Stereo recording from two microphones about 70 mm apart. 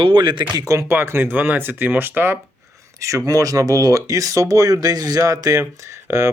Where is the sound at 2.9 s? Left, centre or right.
Right.